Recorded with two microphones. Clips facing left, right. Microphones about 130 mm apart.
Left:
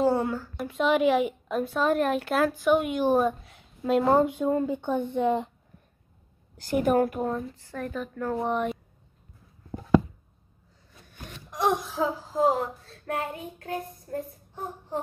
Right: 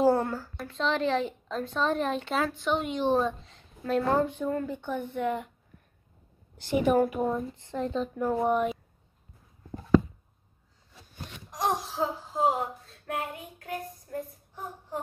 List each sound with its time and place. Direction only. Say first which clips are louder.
0.0 s a sound: even; centre (ahead or behind)
0.7 s a woman's voice: left 5 dB; 10° left (ahead or behind)
6.6 s a woman's voice: left 1 dB; centre (ahead or behind)
7.3 s speech: right 2 dB; 20° right (ahead or behind); by 8.7 s 5° right (ahead or behind)
11.2 s a sound: left 4 dB; 60° left (ahead or behind); by 13.0 s 40° left (ahead or behind)
13.0 s child singing: left 3 dB; 35° left (ahead or behind)
14.1 s a child's voice: left 3 dB; 30° left (ahead or behind)